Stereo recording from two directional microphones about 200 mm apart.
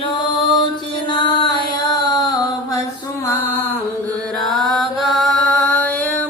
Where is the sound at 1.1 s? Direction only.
20° left (ahead or behind).